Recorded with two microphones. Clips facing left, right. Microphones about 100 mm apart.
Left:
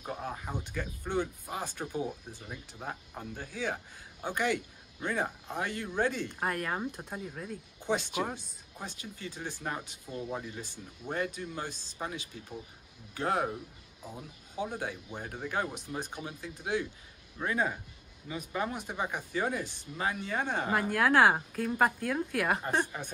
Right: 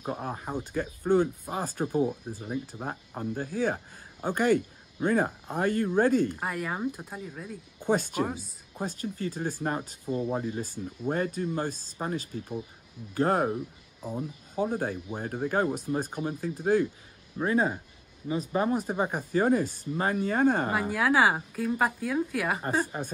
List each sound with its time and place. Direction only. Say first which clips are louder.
0.0 s speech: right 4 dB; 40° right (ahead or behind)
6.4 s speech: right 2 dB; 5° right (ahead or behind)
7.8 s speech: right 5 dB; 45° right (ahead or behind)
17.4 s speech: right 5 dB; 35° right (ahead or behind)
20.9 s speech: even; 5° right (ahead or behind)